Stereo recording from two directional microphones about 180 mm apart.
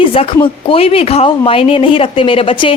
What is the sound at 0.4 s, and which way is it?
A woman's voice, 30° left (ahead or behind).